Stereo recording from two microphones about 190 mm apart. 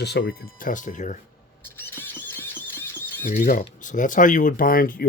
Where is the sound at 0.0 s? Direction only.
60° left (ahead or behind); by 1.2 s 40° left (ahead or behind).